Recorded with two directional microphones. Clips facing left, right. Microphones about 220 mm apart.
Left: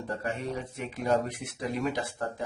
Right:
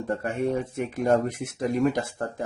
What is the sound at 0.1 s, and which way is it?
Speech, 50° right (ahead or behind).